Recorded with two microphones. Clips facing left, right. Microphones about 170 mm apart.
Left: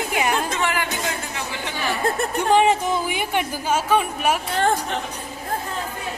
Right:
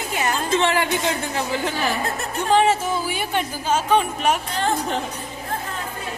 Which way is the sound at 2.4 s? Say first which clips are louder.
Even; 15° left (ahead or behind).